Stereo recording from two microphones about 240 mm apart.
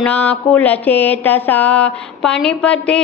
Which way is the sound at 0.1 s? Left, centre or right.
Centre.